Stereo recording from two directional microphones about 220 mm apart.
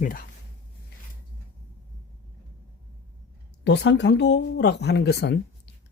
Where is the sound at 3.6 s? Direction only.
50° left (ahead or behind).